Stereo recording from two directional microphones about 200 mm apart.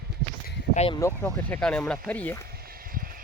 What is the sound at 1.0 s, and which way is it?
Speech, 10° left (ahead or behind).